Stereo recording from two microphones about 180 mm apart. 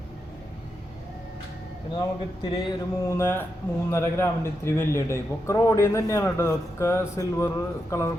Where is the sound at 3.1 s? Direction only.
15° left (ahead or behind).